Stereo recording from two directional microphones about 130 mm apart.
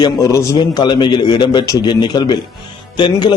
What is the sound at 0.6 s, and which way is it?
A man's voice, 35° left (ahead or behind).